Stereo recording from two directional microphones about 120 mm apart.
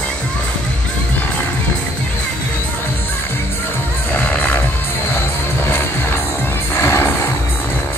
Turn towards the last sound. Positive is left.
turn(degrees=20)  # may be behind; listen again after turning